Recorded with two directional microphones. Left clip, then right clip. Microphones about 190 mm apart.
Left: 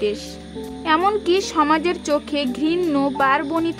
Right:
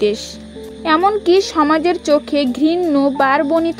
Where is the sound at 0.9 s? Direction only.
20° right (ahead or behind).